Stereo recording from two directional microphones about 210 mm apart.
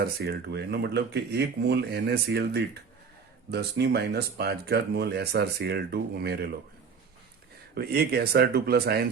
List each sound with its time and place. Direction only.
0.0 s speech: 50° right (ahead or behind)
7.8 s speech: 50° right (ahead or behind)